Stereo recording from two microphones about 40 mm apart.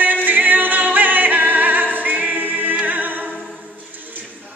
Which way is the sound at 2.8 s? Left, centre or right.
Right.